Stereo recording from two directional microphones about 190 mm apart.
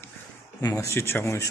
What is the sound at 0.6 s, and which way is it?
Speech, 15° left (ahead or behind).